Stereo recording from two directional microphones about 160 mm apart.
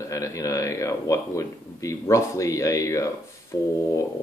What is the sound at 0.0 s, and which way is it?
A man's voice, 20° left (ahead or behind).